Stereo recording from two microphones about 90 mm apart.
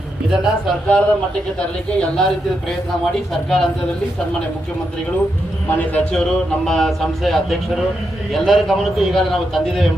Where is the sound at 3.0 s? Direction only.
5° left (ahead or behind).